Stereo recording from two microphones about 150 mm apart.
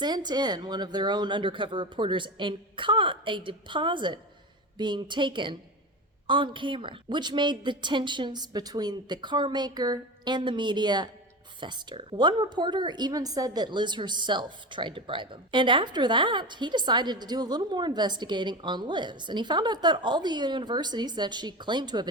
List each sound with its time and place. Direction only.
0.0 s a woman's voice: 30° right (ahead or behind)